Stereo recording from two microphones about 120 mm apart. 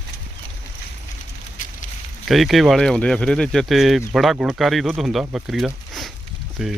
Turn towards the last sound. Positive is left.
turn(degrees=0)  # may be behind; listen again after turning